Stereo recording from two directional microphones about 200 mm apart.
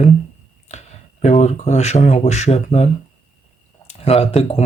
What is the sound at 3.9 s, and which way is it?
Speech, 30° left (ahead or behind).